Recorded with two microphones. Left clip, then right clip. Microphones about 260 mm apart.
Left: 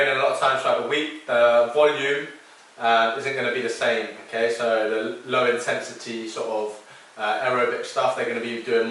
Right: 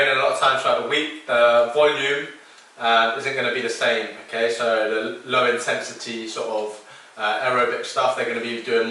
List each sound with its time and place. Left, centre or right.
0.0 s speech: centre
6.4 s speech: centre
7.2 s speech: centre